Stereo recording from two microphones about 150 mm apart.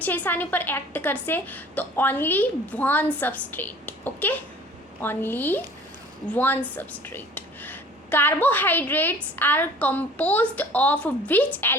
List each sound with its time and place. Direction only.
0.0 s a woman's voice: 10° left (ahead or behind)